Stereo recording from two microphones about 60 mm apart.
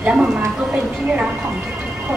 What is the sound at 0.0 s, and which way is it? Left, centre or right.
Speech, right.